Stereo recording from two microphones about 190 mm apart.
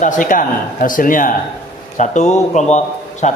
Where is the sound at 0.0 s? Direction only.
45° left (ahead or behind).